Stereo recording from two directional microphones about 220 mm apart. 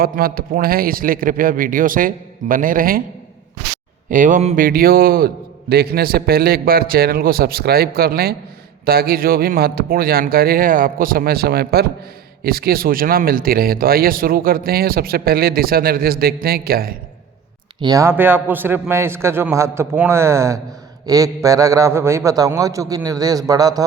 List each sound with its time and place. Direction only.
0.0 s a man's voice: 40° right (ahead or behind)
4.1 s speech: 35° right (ahead or behind)
17.7 s a man's voice: 15° right (ahead or behind)